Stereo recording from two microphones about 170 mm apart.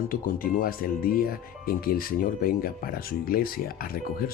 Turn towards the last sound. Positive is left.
turn(degrees=60)  # may be behind; listen again after turning